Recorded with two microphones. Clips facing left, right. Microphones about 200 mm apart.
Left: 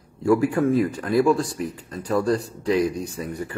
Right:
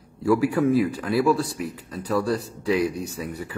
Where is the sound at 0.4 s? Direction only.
5° right (ahead or behind).